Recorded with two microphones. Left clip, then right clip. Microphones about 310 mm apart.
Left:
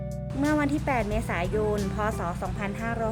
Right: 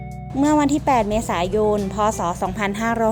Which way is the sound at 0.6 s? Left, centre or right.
Centre.